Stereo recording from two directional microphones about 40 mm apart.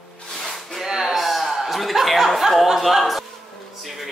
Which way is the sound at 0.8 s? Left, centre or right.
Centre.